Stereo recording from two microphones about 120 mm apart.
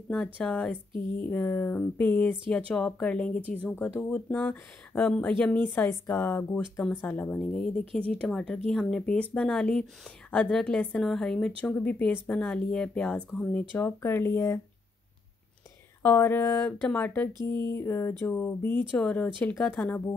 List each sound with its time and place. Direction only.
0.1 s speech: 5° left (ahead or behind)
1.2 s speech: 15° left (ahead or behind)
16.0 s speech: 20° left (ahead or behind)
16.5 s speech: 10° left (ahead or behind)
17.6 s speech: 25° left (ahead or behind); by 20.0 s 5° left (ahead or behind)